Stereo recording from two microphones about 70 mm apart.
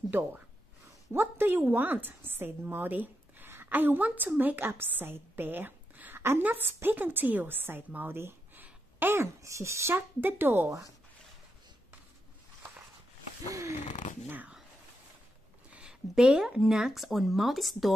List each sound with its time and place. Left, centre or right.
1.1 s a woman's voice: right
8.6 s a sound: right
9.4 s speech: right
9.9 s a woman's voice: right
13.5 s speech: right
14.2 s dog: right
15.7 s speech: centre